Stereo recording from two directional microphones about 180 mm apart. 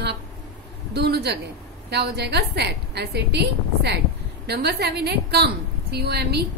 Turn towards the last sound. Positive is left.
turn(degrees=-65)  # may be behind; listen again after turning